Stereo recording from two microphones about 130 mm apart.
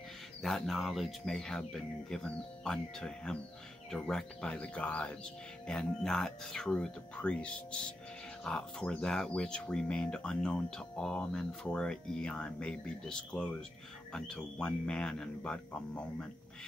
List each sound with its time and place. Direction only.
0.4 s speech: centre (ahead or behind)